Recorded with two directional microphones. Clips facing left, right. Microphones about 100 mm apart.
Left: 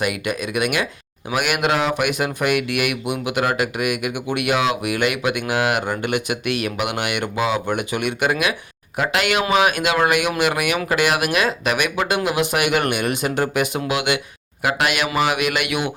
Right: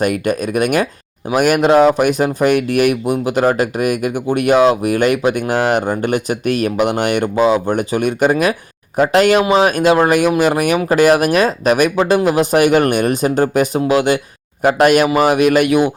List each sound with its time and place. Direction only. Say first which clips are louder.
0.0 s speech: right 7 dB; 45° right (ahead or behind)